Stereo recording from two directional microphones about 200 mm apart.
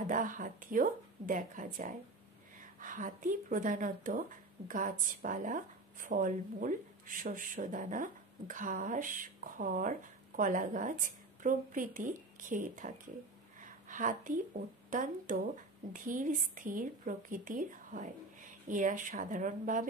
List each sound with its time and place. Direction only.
0.0 s speech: 40° right (ahead or behind)